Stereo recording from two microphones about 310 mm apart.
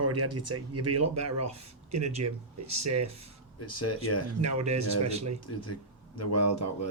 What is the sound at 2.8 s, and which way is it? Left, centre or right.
Speech, right.